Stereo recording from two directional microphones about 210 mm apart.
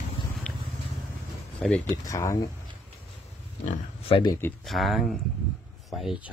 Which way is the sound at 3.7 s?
25° left (ahead or behind).